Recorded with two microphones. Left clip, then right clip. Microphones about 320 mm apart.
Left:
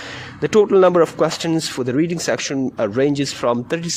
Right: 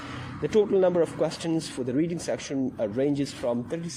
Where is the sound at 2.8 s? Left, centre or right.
Left.